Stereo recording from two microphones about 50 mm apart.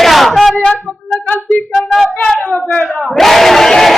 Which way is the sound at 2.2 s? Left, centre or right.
Left.